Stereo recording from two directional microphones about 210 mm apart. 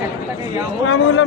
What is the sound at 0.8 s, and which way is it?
Speech, 70° left (ahead or behind).